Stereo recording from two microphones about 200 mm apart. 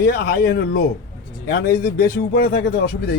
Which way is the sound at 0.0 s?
55° left (ahead or behind).